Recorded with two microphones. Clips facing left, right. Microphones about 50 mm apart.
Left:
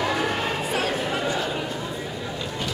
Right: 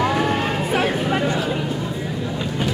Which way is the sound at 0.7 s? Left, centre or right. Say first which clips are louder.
Right 7 dB; right.